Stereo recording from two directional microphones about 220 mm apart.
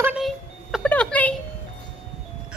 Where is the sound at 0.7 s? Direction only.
5° left (ahead or behind).